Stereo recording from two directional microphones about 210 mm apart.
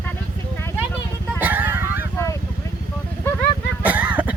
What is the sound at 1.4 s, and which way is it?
Vehicle, 10° right (ahead or behind).